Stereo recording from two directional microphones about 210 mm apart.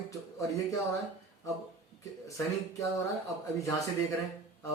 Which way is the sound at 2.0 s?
15° left (ahead or behind).